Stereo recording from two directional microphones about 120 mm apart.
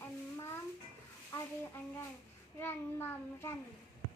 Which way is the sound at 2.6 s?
20° left (ahead or behind).